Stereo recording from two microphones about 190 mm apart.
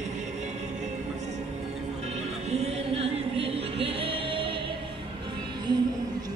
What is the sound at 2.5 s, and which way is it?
Music, 35° right (ahead or behind).